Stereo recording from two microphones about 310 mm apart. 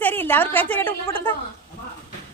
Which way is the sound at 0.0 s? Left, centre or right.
Centre.